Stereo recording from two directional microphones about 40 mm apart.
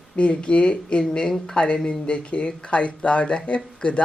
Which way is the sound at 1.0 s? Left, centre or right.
Centre.